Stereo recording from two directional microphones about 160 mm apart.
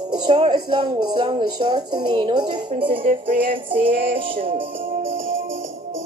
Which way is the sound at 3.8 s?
35° right (ahead or behind).